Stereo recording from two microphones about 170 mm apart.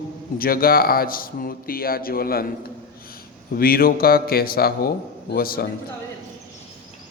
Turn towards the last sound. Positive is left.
turn(degrees=60)  # may be behind; listen again after turning